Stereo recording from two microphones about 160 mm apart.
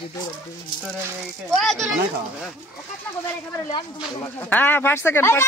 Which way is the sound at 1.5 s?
5° left (ahead or behind).